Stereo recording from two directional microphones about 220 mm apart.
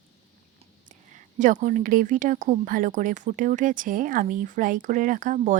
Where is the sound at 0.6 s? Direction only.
35° right (ahead or behind).